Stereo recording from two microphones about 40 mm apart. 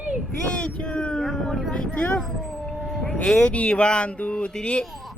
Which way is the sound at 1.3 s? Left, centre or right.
Centre.